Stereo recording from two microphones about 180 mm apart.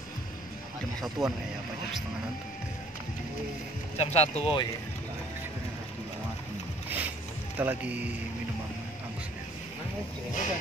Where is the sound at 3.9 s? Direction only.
35° left (ahead or behind).